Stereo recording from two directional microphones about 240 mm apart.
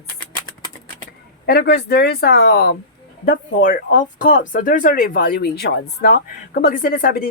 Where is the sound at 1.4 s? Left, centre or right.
Left.